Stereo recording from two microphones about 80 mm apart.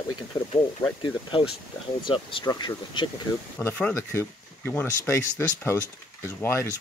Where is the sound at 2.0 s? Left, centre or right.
Left.